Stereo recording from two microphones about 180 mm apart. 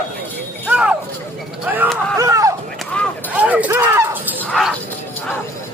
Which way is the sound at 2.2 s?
20° right (ahead or behind).